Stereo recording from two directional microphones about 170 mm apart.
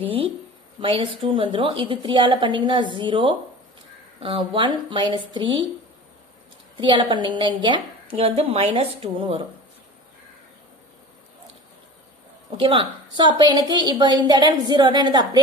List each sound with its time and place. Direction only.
0.0 s a woman's voice: 30° right (ahead or behind)
6.8 s a woman's voice: 30° right (ahead or behind)
12.5 s a woman's voice: 30° right (ahead or behind)